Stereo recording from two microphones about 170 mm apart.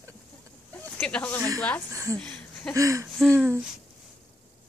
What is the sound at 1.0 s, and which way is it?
Snake, 10° left (ahead or behind).